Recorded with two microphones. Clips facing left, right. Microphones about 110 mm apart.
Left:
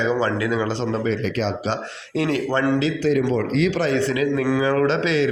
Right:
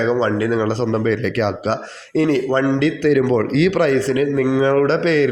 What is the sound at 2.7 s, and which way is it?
Speech, 45° right (ahead or behind).